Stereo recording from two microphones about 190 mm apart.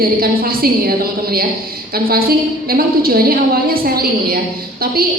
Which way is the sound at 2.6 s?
50° right (ahead or behind).